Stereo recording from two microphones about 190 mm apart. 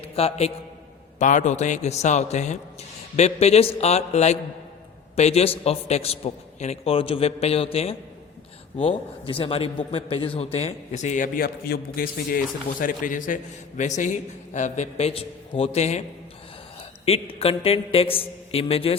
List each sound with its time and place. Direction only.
0.2 s a man's voice: 30° left (ahead or behind)
17.1 s speech: 30° left (ahead or behind)